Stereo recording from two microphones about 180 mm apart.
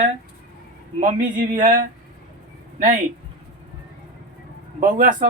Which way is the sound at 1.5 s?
50° right (ahead or behind).